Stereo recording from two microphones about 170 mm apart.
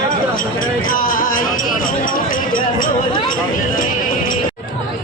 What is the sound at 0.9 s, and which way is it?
Music, 55° left (ahead or behind).